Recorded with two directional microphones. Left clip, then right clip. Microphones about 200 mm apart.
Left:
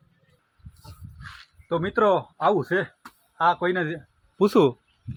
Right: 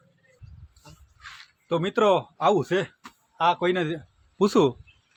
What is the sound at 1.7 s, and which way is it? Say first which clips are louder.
Speech: even; 5° right (ahead or behind).